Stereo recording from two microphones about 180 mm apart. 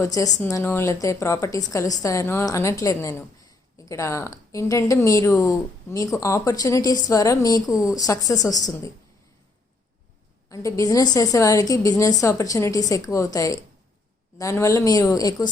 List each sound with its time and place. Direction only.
0.0 s a woman's voice: 20° left (ahead or behind)
10.5 s a woman's voice: 20° left (ahead or behind)